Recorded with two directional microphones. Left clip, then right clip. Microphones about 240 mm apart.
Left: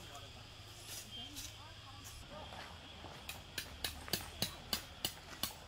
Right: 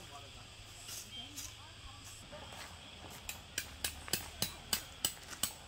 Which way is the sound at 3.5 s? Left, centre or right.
Centre.